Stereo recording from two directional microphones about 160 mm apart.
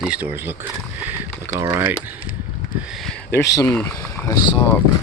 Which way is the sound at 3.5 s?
15° left (ahead or behind).